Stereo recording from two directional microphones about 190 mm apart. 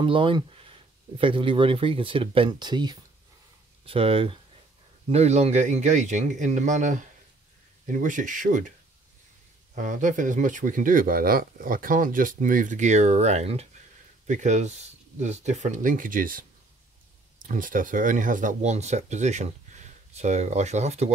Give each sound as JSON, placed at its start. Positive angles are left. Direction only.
{"t": 0.0, "sound": "speech", "side_deg": -25}
{"t": 9.8, "sound": "speech", "side_deg": -40}